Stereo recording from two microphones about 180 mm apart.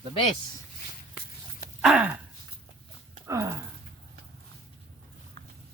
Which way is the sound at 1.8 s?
5° right (ahead or behind).